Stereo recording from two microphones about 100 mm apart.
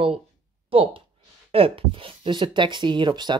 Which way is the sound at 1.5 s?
70° right (ahead or behind).